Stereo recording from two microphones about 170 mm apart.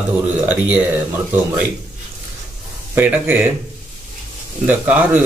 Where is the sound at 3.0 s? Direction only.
10° right (ahead or behind).